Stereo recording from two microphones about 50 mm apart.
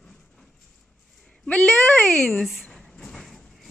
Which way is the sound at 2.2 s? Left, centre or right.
Centre.